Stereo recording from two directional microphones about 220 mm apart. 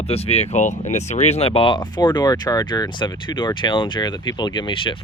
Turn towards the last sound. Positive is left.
turn(degrees=25)  # may be behind; listen again after turning